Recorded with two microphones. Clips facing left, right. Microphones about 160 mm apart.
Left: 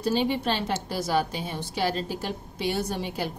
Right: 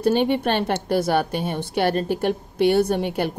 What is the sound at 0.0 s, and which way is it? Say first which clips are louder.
A woman's voice: right 6 dB; 60° right (ahead or behind).